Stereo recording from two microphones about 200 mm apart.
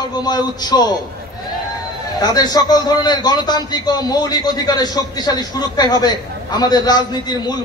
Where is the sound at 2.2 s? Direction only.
20° left (ahead or behind).